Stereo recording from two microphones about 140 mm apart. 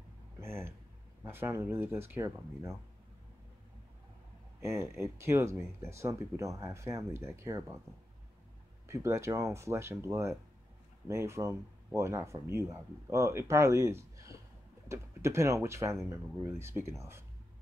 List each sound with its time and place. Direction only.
0.4 s speech: 15° right (ahead or behind)
4.6 s speech: 20° right (ahead or behind)
8.8 s speech: 20° right (ahead or behind)